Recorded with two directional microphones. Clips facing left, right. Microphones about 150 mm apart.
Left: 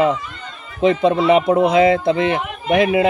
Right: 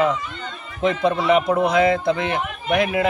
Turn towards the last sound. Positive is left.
turn(degrees=25)  # may be behind; listen again after turning